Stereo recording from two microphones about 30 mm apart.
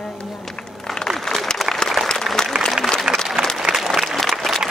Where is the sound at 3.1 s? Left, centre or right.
Right.